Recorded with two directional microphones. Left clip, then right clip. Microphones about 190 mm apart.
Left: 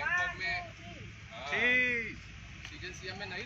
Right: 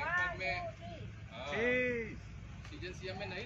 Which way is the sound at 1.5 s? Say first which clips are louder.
Left 5 dB; 40° right (ahead or behind).